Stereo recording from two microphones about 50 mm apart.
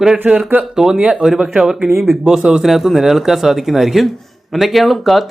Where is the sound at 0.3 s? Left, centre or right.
Right.